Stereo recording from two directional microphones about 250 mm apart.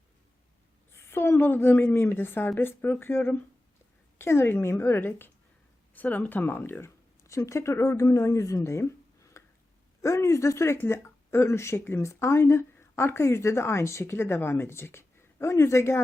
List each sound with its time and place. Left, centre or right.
0.9 s speech: centre